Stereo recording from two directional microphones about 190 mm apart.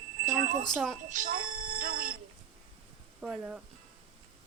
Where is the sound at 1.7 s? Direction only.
50° right (ahead or behind).